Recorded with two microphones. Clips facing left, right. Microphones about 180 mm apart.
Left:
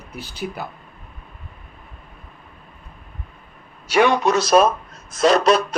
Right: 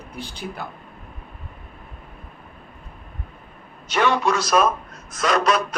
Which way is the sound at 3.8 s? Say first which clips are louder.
Left 4 dB; 15° left (ahead or behind).